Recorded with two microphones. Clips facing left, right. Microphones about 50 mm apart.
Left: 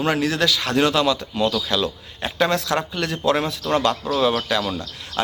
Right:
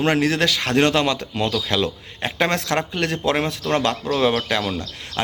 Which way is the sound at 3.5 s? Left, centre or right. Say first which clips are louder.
Left 1 dB; right.